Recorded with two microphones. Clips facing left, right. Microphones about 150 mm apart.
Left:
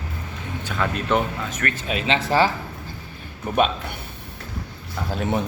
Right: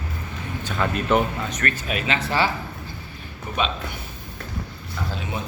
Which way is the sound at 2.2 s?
40° left (ahead or behind).